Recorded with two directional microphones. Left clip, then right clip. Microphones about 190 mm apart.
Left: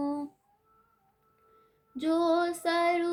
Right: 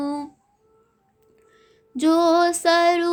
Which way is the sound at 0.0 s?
55° right (ahead or behind).